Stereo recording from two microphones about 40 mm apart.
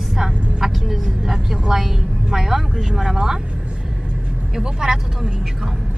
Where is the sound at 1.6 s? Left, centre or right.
Centre.